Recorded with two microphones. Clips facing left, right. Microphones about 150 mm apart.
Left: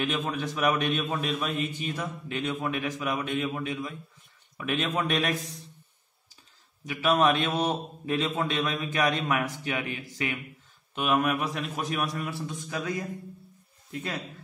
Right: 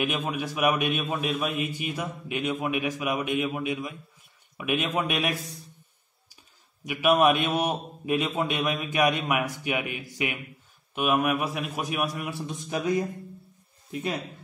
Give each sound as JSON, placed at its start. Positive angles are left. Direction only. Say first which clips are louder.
{"t": 0.0, "sound": "a man's voice", "louder": "right 1 dB", "side_deg": -10}
{"t": 6.9, "sound": "a man's voice", "louder": "right 2 dB", "side_deg": -15}
{"t": 13.9, "sound": "a man's voice", "louder": "right 4 dB", "side_deg": -15}